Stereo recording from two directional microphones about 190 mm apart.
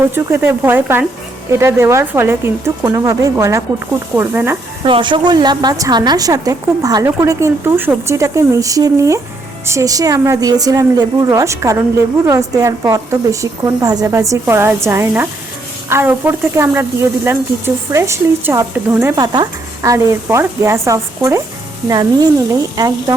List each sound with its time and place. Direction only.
0.1 s a woman's voice: 10° right (ahead or behind)
4.8 s a woman's voice: 25° right (ahead or behind)